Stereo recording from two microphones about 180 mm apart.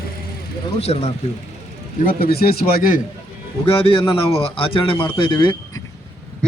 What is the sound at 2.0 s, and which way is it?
Speech, 55° left (ahead or behind).